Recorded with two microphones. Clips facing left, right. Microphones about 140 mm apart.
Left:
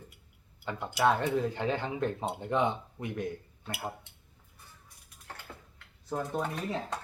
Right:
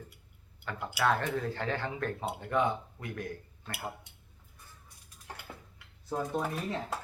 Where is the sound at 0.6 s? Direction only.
20° left (ahead or behind).